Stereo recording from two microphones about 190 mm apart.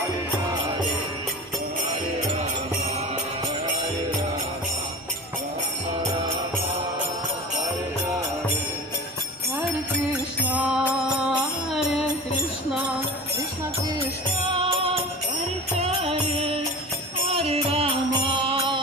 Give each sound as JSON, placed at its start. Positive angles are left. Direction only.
{"t": 10.4, "sound": "music", "side_deg": -10}
{"t": 15.8, "sound": "music", "side_deg": -35}